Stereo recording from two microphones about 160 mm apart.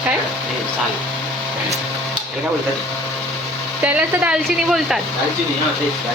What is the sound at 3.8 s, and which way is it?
Speech, 10° right (ahead or behind).